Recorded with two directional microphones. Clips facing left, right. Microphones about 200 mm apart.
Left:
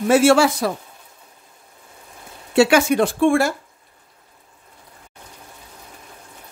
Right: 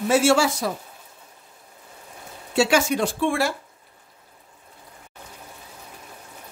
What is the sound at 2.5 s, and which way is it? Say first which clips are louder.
Speech: left 5 dB; 60° left (ahead or behind).